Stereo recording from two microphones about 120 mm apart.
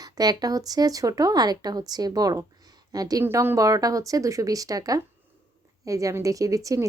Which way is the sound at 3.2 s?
20° right (ahead or behind).